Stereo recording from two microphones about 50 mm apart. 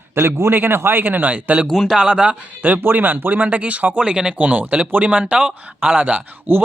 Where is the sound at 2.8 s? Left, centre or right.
Right; by 4.3 s centre.